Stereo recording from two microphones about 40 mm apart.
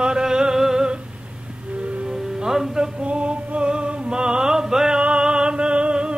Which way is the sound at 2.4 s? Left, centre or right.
Centre.